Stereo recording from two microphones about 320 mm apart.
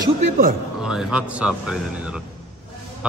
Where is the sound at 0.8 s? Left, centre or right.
Centre.